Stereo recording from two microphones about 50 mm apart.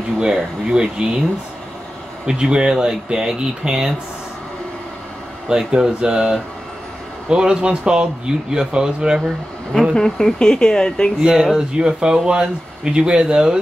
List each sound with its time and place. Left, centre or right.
0.7 s speech: centre
2.2 s speech: centre
5.5 s speech: centre
9.9 s speech: centre
11.1 s speech: centre